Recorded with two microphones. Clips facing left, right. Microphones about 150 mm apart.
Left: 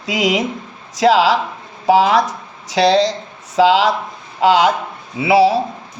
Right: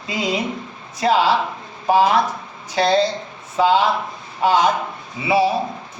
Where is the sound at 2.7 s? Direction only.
90° left.